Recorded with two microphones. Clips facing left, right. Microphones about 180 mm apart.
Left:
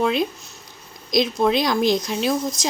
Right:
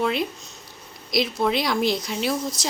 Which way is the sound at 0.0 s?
15° left (ahead or behind).